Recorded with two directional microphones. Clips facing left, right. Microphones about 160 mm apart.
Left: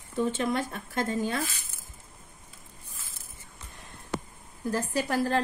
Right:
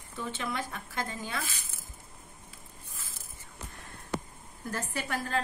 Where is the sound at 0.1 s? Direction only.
45° left (ahead or behind).